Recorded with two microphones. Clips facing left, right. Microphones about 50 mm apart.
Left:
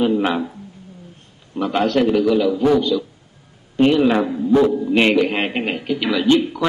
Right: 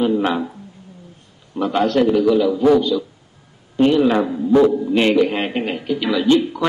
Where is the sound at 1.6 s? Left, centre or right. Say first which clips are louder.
Right 1 dB; left.